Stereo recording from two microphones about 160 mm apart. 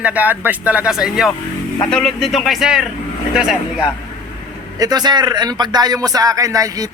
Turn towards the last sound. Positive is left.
turn(degrees=-20)  # may be behind; listen again after turning